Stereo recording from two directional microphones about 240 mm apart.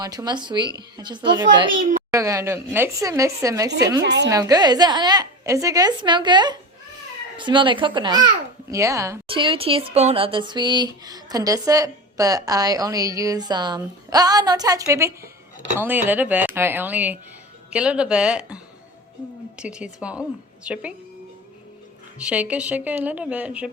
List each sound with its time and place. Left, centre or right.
0.0 s a woman's voice: centre
4.0 s a woman's voice: right
4.3 s a woman's voice: centre
22.2 s a woman's voice: centre